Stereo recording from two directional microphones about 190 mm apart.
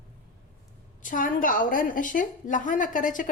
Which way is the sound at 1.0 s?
45° left (ahead or behind).